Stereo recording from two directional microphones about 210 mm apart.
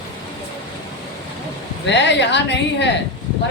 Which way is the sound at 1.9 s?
55° left (ahead or behind).